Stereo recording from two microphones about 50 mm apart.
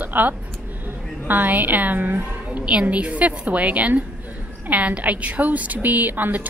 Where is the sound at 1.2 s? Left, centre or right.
Right.